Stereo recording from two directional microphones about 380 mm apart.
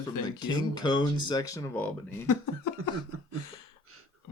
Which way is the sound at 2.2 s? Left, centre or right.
Left.